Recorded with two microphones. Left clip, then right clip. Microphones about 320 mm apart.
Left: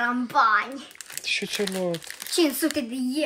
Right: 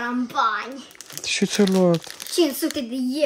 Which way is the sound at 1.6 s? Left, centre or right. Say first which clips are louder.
Right 8 dB; right.